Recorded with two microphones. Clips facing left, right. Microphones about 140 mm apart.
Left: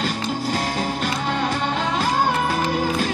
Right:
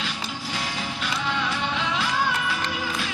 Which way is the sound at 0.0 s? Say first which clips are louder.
Left 8 dB; 45° left (ahead or behind).